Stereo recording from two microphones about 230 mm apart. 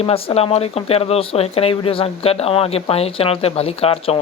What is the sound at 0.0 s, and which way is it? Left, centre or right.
Speech, left.